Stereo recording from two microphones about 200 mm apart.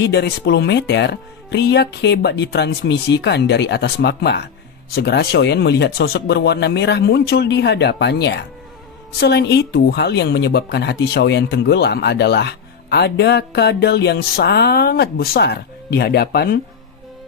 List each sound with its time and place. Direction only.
0.0 s speech: 55° left (ahead or behind)